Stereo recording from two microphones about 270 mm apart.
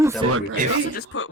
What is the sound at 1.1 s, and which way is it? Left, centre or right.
Speech, left.